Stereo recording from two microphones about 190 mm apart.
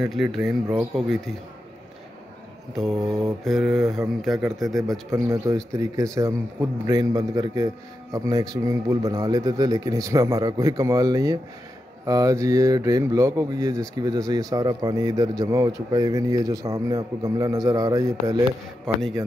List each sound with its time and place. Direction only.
0.0 s speech: centre (ahead or behind)
2.7 s speech: centre (ahead or behind)
5.1 s a man's voice: 15° right (ahead or behind)